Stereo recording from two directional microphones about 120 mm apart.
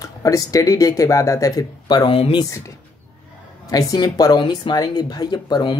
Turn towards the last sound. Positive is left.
turn(degrees=35)  # may be behind; listen again after turning